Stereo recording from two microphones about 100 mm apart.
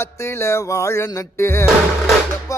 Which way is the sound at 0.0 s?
25° left (ahead or behind).